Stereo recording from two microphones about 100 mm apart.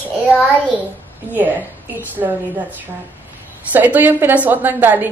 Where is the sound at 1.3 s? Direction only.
20° right (ahead or behind).